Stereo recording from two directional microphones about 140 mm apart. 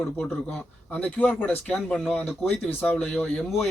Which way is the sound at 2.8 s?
10° left (ahead or behind).